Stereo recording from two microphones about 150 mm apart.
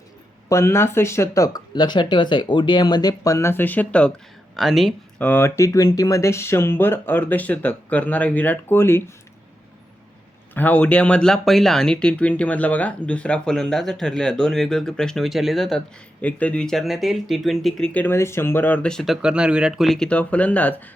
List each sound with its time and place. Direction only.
0.4 s speech: 20° left (ahead or behind); by 4.9 s centre (ahead or behind)
5.2 s speech: 15° left (ahead or behind)
10.5 s speech: 10° left (ahead or behind)